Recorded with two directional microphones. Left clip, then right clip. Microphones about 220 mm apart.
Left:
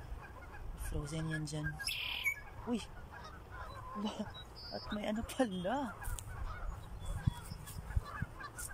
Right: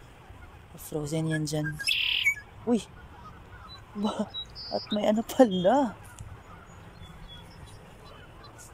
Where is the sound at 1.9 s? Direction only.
35° left (ahead or behind).